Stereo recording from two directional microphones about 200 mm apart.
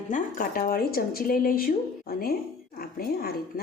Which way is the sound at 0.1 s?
40° left (ahead or behind).